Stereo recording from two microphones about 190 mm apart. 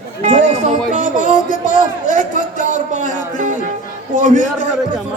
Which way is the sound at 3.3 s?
40° right (ahead or behind).